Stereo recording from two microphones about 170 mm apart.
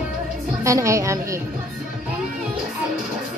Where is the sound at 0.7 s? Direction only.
20° right (ahead or behind).